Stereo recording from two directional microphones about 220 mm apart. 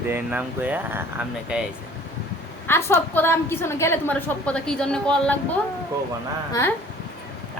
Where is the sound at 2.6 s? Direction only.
10° left (ahead or behind).